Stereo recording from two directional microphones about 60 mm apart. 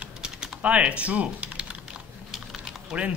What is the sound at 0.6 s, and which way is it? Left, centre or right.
Speech, right.